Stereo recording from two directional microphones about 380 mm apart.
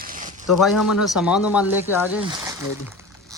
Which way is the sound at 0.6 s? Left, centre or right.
Centre.